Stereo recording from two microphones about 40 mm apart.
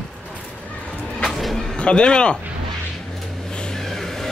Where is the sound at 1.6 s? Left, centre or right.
Left.